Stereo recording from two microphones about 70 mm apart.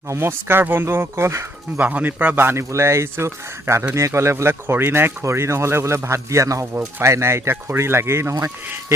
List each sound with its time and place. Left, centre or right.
0.1 s speech: right
1.8 s speech: right
4.6 s speech: right